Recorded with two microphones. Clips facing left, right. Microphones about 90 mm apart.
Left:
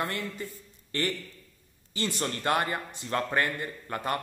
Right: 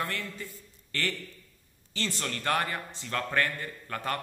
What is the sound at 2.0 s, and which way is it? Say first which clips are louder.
Speech: left 3 dB; 15° left (ahead or behind).